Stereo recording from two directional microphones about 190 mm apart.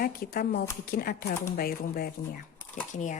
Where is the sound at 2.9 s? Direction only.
40° left (ahead or behind).